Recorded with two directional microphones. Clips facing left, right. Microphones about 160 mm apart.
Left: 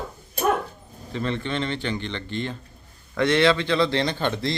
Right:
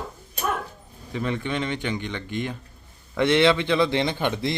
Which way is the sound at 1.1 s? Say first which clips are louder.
Even; 10° right (ahead or behind).